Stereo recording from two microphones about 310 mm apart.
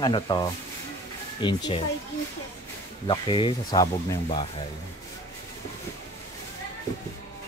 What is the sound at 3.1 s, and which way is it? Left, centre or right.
Speech, centre.